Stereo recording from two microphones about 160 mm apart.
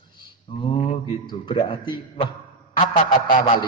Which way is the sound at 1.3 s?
30° left (ahead or behind).